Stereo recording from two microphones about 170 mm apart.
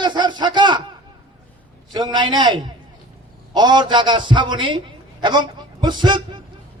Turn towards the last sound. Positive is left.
turn(degrees=-25)  # may be behind; listen again after turning